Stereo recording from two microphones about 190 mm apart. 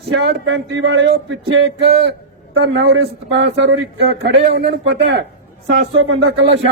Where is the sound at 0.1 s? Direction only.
65° right (ahead or behind).